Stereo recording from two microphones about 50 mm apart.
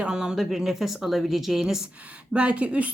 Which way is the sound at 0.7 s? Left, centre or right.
Centre.